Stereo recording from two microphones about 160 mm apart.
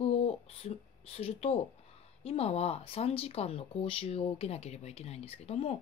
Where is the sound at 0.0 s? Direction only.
40° left (ahead or behind).